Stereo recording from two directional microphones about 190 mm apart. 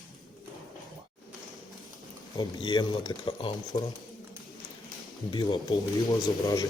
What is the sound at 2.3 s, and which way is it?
Speech, 20° left (ahead or behind).